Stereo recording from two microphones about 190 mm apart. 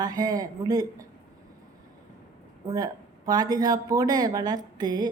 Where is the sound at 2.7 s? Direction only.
20° right (ahead or behind).